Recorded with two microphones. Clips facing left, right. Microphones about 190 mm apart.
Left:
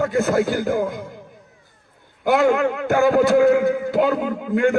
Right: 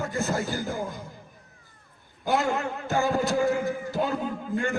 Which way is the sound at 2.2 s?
65° left (ahead or behind).